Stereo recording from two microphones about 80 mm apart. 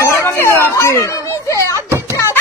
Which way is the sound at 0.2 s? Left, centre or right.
Left.